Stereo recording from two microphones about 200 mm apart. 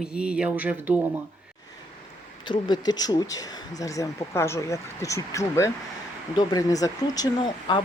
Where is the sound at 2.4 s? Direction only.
20° left (ahead or behind).